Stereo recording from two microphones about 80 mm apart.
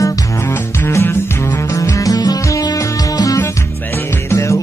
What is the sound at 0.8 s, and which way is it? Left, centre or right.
Music, left.